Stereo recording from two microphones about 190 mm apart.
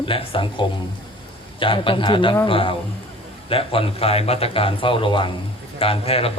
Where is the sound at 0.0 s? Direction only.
25° left (ahead or behind).